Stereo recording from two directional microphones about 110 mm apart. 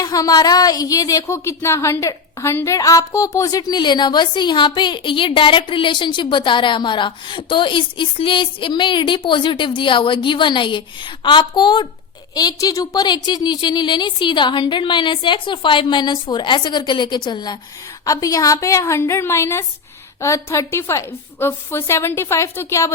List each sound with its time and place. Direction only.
0.0 s a woman's voice: 35° left (ahead or behind)